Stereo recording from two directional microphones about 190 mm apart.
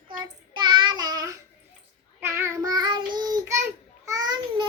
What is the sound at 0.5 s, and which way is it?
Child singing, 25° right (ahead or behind).